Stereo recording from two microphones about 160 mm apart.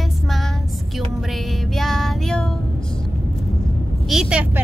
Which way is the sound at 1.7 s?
Centre (ahead or behind).